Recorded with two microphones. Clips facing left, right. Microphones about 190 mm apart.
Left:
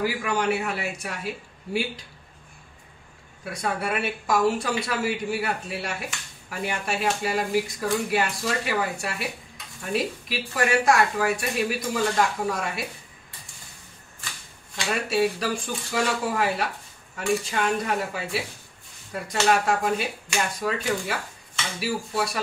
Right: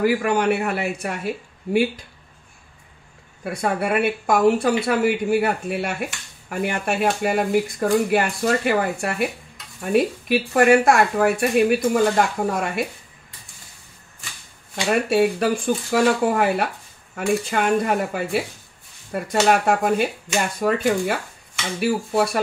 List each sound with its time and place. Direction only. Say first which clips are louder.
0.0 s speech: right 6 dB; 55° right (ahead or behind)
3.4 s speech: right 5 dB; 55° right (ahead or behind)
14.9 s speech: right 6 dB; 55° right (ahead or behind)